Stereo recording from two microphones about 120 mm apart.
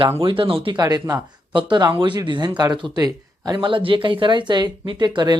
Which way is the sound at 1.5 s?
40° right (ahead or behind).